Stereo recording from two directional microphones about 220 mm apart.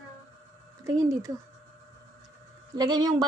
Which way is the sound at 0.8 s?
15° right (ahead or behind).